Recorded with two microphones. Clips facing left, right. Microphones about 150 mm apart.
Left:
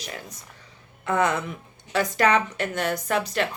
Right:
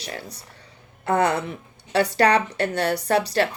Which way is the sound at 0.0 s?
35° right (ahead or behind).